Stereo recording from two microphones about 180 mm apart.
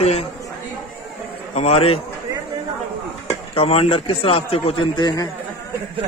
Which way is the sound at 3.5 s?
35° left (ahead or behind).